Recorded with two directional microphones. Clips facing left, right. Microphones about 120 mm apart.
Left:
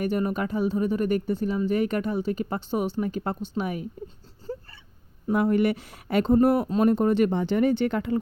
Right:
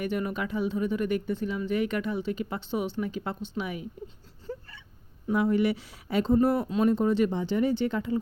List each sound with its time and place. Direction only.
0.0 s speech: 40° left (ahead or behind)
4.5 s hiccup: 30° left (ahead or behind)
5.3 s speech: 55° left (ahead or behind)